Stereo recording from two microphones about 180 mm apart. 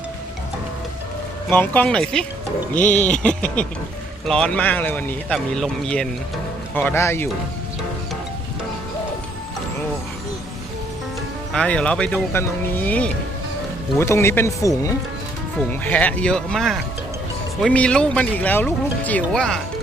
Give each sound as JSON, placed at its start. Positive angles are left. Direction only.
{"t": 1.5, "sound": "speech", "side_deg": 10}
{"t": 11.5, "sound": "speech", "side_deg": 5}